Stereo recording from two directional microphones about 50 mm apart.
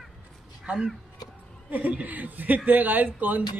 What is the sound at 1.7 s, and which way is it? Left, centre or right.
A woman's voice, right.